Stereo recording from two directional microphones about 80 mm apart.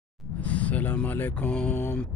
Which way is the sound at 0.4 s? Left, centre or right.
Centre.